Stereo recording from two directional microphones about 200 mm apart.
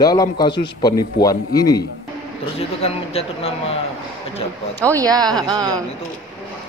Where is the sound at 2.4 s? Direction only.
30° left (ahead or behind).